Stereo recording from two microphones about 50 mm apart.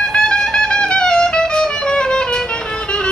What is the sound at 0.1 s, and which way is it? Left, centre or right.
Music, centre.